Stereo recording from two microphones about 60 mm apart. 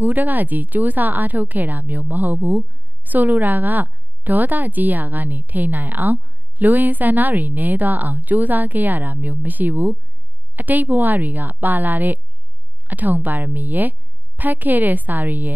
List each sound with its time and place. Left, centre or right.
0.0 s a woman's voice: right